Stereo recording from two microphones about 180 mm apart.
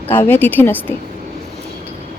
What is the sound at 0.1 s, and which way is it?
Speech, 10° left (ahead or behind).